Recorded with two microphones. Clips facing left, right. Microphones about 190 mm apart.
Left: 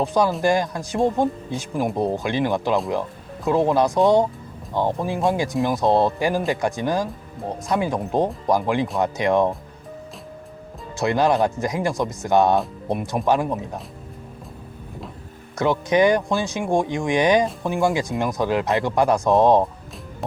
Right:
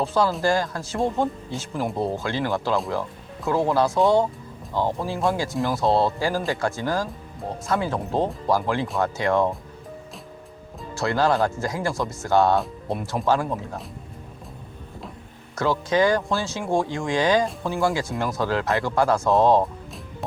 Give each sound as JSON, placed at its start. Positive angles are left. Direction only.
{"t": 0.0, "sound": "speech", "side_deg": 15}
{"t": 10.9, "sound": "speech", "side_deg": 20}
{"t": 15.5, "sound": "speech", "side_deg": 20}